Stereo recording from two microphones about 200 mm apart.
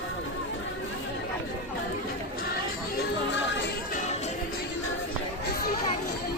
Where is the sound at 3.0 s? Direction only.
65° left (ahead or behind).